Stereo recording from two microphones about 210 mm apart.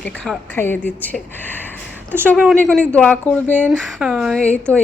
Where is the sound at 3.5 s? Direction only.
5° right (ahead or behind).